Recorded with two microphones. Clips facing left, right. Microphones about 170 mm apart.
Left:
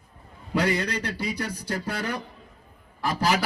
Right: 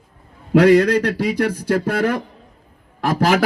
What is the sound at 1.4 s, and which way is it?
A man's voice, 55° right (ahead or behind).